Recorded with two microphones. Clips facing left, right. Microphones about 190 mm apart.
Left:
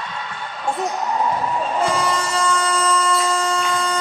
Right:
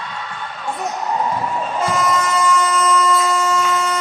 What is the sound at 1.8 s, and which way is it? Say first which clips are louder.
Vehicle: right 5 dB; 30° left (ahead or behind).